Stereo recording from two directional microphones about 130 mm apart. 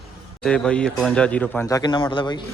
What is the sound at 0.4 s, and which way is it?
Speech, 5° left (ahead or behind).